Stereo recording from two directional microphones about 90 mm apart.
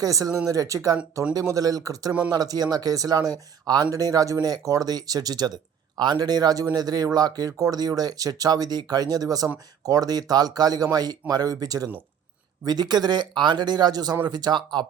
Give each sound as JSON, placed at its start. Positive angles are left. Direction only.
{"t": 0.0, "sound": "speech", "side_deg": -40}